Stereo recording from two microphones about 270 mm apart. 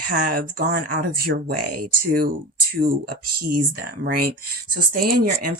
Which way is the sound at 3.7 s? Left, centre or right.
Right.